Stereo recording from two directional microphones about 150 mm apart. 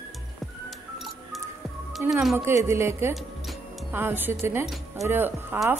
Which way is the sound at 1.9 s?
Centre (ahead or behind).